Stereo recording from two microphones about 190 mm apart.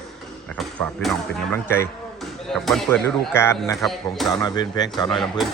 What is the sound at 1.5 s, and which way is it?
Speech, 10° left (ahead or behind).